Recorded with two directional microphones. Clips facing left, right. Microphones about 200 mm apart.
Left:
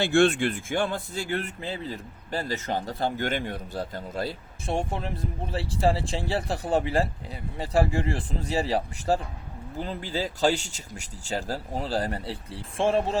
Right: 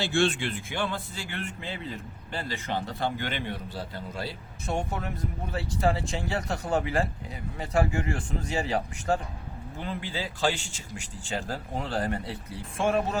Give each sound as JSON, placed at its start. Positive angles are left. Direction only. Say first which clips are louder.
{"t": 0.0, "sound": "speech", "louder": "left 5 dB", "side_deg": 55}
{"t": 4.6, "sound": "a man's voice", "louder": "left 2 dB", "side_deg": 30}